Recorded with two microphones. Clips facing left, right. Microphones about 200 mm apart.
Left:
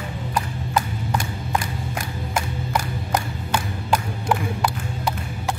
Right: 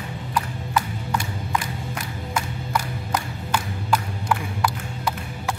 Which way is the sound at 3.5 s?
25° left (ahead or behind).